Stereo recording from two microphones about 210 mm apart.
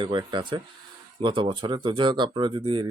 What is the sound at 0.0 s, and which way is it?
Speech, 20° right (ahead or behind).